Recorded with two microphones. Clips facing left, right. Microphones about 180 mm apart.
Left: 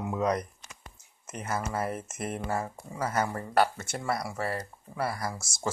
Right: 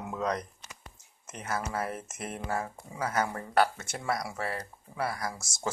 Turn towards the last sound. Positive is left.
turn(degrees=5)  # may be behind; listen again after turning